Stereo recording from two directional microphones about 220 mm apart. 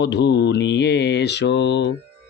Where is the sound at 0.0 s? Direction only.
50° left (ahead or behind).